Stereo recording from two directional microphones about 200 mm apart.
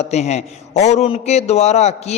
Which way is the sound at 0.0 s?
35° left (ahead or behind).